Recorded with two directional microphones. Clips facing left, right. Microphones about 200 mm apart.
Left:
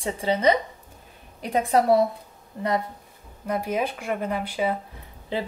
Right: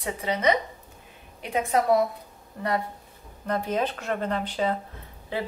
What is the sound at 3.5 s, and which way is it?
Speech, 10° left (ahead or behind).